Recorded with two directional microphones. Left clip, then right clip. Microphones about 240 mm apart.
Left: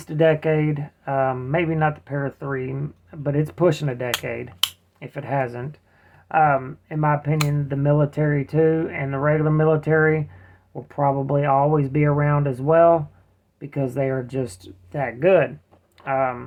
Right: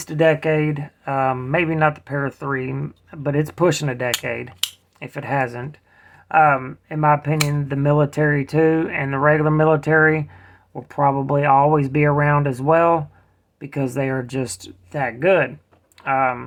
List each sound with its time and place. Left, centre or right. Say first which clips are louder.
0.0 s speech: right 2 dB; centre